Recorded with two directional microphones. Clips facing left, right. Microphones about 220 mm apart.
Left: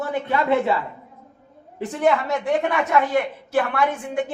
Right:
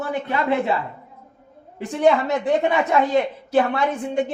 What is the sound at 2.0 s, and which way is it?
A woman's voice, 20° right (ahead or behind).